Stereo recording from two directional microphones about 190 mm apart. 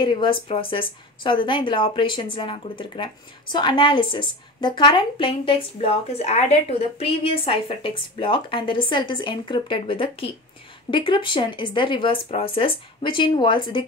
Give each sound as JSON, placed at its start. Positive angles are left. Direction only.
{"t": 0.0, "sound": "speech", "side_deg": 25}